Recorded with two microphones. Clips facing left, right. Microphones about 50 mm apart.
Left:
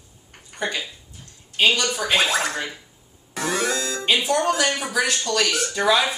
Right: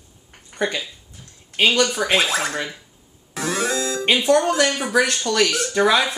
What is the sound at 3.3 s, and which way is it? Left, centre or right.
Music, centre.